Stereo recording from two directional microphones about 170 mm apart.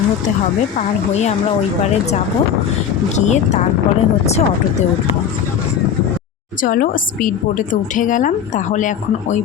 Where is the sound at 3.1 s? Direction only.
45° left (ahead or behind).